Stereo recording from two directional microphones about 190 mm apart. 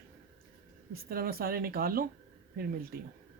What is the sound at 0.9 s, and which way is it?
Speech, 50° right (ahead or behind).